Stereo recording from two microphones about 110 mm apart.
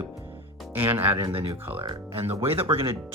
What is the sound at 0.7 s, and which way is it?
Speech, 20° right (ahead or behind).